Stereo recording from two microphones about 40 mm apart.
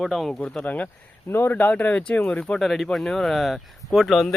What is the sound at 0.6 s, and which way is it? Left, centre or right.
Speech, left.